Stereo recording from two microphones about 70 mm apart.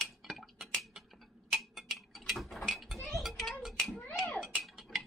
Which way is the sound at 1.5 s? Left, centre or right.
Centre.